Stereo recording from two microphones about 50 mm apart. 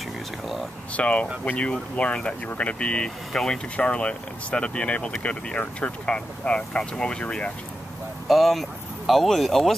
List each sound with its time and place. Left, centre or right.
0.9 s speech: left
3.7 s speech: left
8.3 s speech: centre